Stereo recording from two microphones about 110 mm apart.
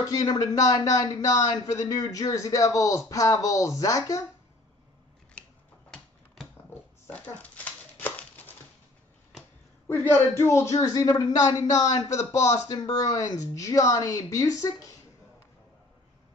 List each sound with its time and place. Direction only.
0.1 s a man's voice: 35° left (ahead or behind)
6.7 s a sound: 15° left (ahead or behind)
9.8 s a man's voice: 20° left (ahead or behind)